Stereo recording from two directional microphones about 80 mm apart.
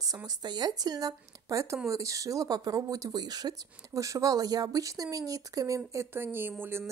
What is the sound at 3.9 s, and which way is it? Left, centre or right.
A woman's voice, right.